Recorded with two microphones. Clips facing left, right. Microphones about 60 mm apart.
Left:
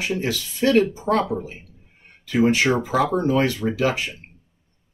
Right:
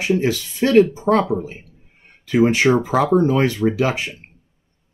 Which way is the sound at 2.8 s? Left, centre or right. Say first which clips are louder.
Right 5 dB; right.